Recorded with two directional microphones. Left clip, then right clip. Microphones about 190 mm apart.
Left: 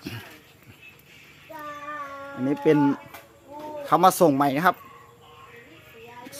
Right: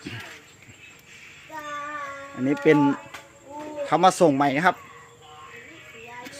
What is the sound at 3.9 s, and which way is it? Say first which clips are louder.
Speech: even; 10° left (ahead or behind).